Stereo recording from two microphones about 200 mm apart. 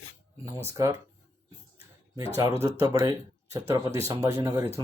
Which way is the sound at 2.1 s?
15° right (ahead or behind).